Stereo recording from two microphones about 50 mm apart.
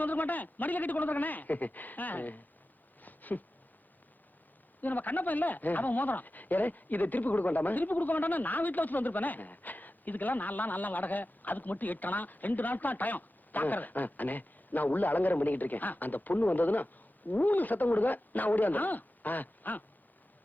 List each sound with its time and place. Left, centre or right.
0.0 s speech: left
3.0 s a sound: left
4.8 s speech: left